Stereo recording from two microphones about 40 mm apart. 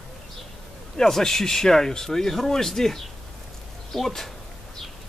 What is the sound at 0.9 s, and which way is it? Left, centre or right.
Speech, centre.